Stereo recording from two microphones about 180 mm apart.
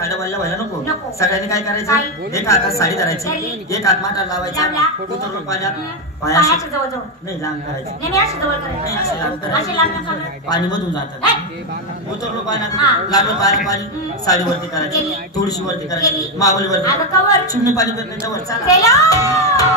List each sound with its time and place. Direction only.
0.0 s a woman's voice: 15° left (ahead or behind)
6.2 s a woman's voice: 20° left (ahead or behind)
8.0 s a woman's voice: 20° left (ahead or behind)
12.4 s a man's voice: 20° left (ahead or behind)